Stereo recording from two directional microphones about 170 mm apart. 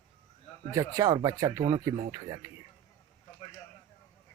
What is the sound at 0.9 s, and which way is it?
Speech, 20° right (ahead or behind).